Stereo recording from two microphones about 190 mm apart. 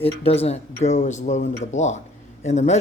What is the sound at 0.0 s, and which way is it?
Speech, 30° left (ahead or behind).